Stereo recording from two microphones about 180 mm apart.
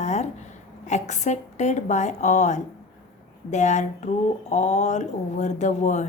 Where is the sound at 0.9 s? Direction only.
40° left (ahead or behind).